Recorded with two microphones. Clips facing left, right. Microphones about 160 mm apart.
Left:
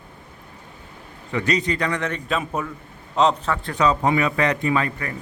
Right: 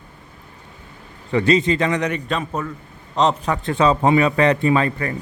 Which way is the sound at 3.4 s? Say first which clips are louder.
Right 3 dB; 20° right (ahead or behind).